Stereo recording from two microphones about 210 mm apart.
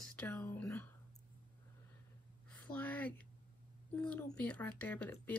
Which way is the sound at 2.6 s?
5° left (ahead or behind).